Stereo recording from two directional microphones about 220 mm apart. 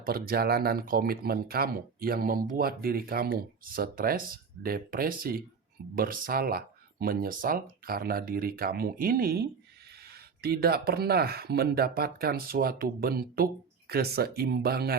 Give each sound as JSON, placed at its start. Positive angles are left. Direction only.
{"t": 0.0, "sound": "speech", "side_deg": -45}